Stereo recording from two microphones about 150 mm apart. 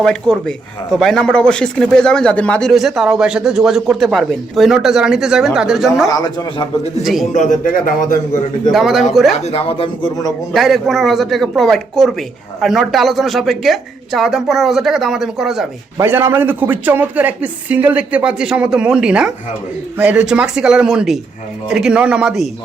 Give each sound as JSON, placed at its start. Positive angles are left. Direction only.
{"t": 0.0, "sound": "speech", "side_deg": 5}
{"t": 6.1, "sound": "speech", "side_deg": 25}
{"t": 7.0, "sound": "speech", "side_deg": 0}
{"t": 7.3, "sound": "a man's voice", "side_deg": 55}
{"t": 8.7, "sound": "speech", "side_deg": 0}
{"t": 9.3, "sound": "speech", "side_deg": 45}
{"t": 10.5, "sound": "speech", "side_deg": 0}
{"t": 16.0, "sound": "a man's voice", "side_deg": -15}